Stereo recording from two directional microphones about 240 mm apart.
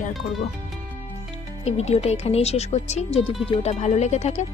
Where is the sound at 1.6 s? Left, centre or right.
Left.